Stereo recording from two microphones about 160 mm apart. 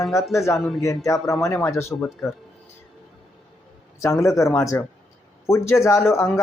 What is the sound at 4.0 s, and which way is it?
A man's voice, 20° left (ahead or behind).